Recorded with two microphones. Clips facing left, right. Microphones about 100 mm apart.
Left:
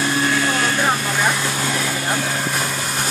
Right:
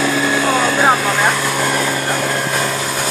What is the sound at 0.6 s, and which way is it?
Vehicle, 90° right.